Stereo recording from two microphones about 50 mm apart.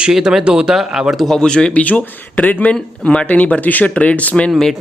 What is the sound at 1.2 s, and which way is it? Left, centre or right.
Speech, centre.